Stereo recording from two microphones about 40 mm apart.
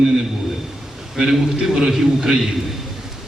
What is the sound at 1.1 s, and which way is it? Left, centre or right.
A man's voice, centre.